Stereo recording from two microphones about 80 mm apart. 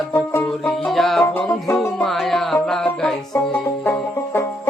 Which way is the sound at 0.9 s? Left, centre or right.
Centre.